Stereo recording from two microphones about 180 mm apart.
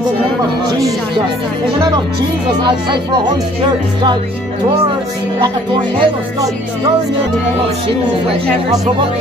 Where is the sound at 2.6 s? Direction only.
25° right (ahead or behind).